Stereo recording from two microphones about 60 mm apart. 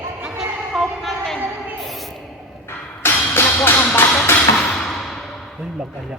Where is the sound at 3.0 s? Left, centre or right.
Left.